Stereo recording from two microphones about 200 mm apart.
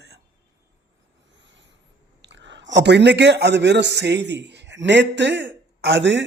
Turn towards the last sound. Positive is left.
turn(degrees=-60)  # may be behind; listen again after turning